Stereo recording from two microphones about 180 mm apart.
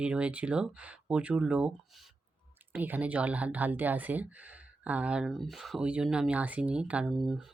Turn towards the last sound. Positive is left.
turn(degrees=-5)  # may be behind; listen again after turning